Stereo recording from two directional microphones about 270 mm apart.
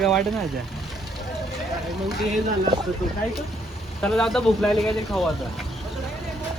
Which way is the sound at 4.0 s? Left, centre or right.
Centre.